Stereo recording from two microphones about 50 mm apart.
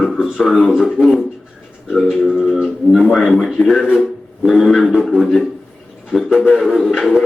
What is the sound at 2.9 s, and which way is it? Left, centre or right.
A man's voice, centre.